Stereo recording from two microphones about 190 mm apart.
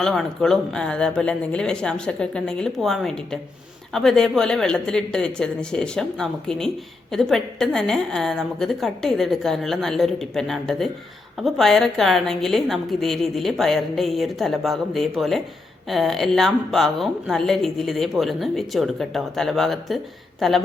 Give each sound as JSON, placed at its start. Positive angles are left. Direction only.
{"t": 0.0, "sound": "a woman's voice", "side_deg": 0}